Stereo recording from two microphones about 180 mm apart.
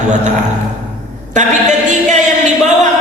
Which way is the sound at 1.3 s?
40° right (ahead or behind).